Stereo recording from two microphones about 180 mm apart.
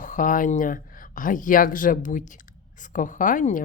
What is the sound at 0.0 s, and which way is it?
A woman's voice, 45° left (ahead or behind).